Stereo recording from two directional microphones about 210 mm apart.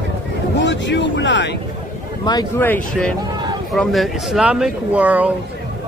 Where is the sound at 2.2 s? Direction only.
20° left (ahead or behind).